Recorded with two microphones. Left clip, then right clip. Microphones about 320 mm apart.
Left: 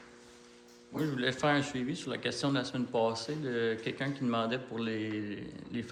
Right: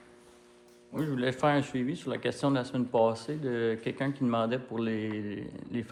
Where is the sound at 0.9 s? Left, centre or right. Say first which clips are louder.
Right 1 dB; centre.